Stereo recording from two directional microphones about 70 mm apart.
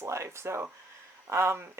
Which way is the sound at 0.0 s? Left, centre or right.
Right.